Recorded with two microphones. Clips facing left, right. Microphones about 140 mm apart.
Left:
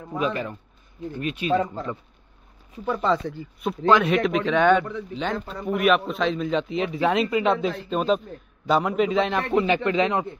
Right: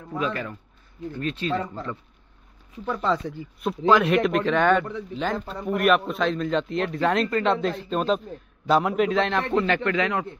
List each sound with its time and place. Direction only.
0.1 s speech: 20° left (ahead or behind)
2.8 s a man's voice: 5° left (ahead or behind)
9.6 s speech: 15° left (ahead or behind)